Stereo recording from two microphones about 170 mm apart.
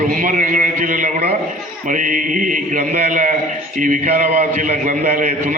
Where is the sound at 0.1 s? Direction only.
50° right (ahead or behind).